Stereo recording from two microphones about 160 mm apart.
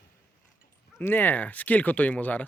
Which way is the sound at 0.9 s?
15° left (ahead or behind).